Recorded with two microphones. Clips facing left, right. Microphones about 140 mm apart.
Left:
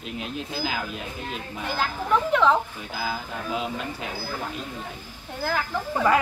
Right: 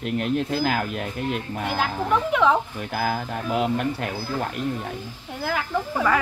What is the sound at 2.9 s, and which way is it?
Speech, 60° right (ahead or behind).